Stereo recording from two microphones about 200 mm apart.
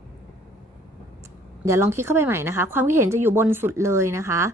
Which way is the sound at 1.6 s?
15° right (ahead or behind).